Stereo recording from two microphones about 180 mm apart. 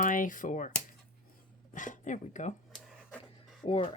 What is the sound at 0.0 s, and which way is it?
Speech, 50° left (ahead or behind).